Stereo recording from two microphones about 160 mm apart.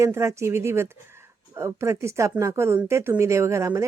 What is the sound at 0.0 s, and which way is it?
Speech, 15° right (ahead or behind).